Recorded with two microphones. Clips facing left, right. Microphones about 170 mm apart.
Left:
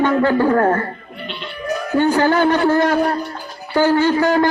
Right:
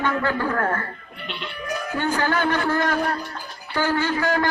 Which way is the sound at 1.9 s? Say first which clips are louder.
Left 9 dB; 25° left (ahead or behind).